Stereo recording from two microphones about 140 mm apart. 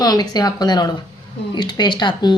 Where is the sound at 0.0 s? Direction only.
30° left (ahead or behind).